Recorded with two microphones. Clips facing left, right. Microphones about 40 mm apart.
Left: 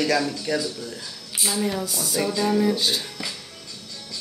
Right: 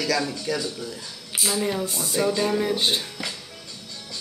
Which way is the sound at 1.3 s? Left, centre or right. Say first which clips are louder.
Even; centre.